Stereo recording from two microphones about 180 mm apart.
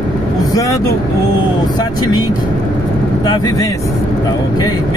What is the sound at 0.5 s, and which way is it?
Speech, 20° left (ahead or behind).